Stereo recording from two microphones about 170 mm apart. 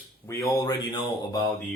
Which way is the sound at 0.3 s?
20° left (ahead or behind).